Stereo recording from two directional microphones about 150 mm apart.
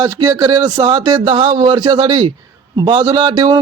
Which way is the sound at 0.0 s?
25° right (ahead or behind).